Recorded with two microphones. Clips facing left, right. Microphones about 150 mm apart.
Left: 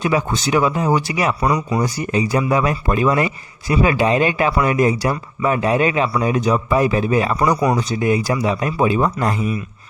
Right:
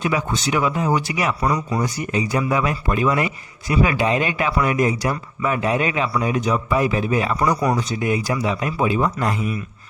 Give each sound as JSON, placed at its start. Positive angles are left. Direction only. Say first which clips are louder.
{"t": 0.0, "sound": "a man's voice", "louder": "left 3 dB", "side_deg": 35}
{"t": 1.5, "sound": "speech", "louder": "left 3 dB", "side_deg": 15}
{"t": 1.8, "sound": "a man's voice", "louder": "left 3 dB", "side_deg": 35}